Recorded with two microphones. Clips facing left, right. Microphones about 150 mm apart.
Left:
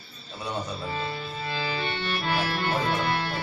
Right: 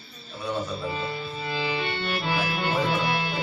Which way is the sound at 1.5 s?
10° right (ahead or behind).